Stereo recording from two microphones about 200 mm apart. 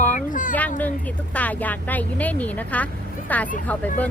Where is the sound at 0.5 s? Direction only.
10° left (ahead or behind).